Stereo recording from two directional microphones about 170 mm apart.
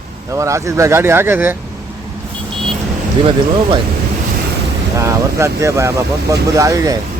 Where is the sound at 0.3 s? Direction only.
15° right (ahead or behind).